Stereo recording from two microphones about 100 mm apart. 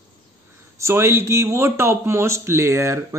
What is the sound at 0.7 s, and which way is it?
A man's voice, 30° right (ahead or behind).